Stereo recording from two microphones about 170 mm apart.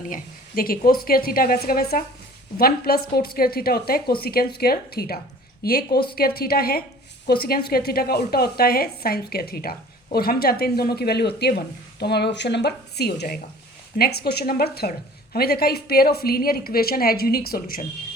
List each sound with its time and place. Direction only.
0.0 s a woman's voice: 55° left (ahead or behind)